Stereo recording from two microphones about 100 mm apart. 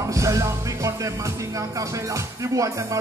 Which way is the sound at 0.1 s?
30° right (ahead or behind).